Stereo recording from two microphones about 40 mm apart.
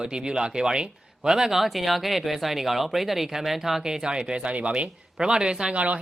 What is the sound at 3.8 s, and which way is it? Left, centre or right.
Speech, right.